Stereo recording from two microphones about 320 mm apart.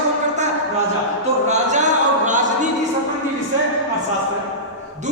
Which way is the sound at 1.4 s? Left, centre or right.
Right.